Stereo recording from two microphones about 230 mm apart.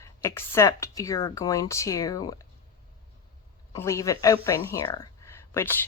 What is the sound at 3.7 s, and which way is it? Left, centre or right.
A woman's voice, centre.